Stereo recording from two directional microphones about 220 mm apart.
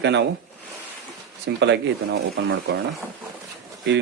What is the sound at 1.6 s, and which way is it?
Speech, 50° right (ahead or behind).